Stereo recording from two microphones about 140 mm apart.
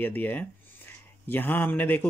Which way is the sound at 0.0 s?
15° left (ahead or behind).